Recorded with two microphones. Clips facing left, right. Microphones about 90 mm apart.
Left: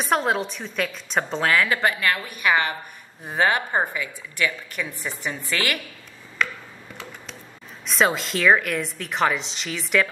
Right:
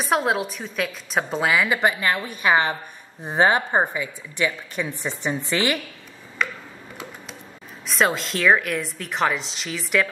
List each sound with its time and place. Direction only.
0.0 s a woman's voice: centre (ahead or behind); by 5.8 s 25° right (ahead or behind)
6.4 s tick-tock: 5° right (ahead or behind)
7.8 s a woman's voice: centre (ahead or behind)